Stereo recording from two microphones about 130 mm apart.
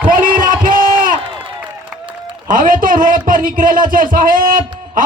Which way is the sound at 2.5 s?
90° right.